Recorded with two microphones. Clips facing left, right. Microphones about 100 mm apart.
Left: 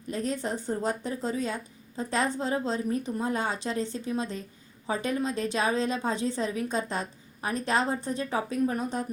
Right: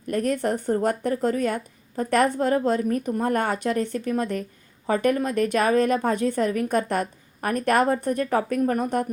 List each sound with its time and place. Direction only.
0.1 s speech: 60° right (ahead or behind)